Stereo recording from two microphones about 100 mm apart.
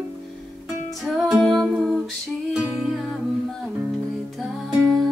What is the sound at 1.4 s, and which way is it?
Humming, centre (ahead or behind).